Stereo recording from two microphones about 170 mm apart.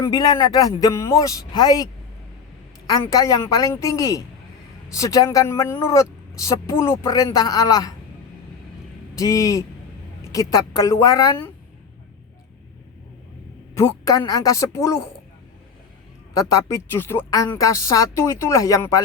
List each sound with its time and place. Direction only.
0.0 s speech: 20° left (ahead or behind)
9.1 s speech: 20° left (ahead or behind)
13.7 s speech: 20° left (ahead or behind)
16.4 s speech: 20° left (ahead or behind)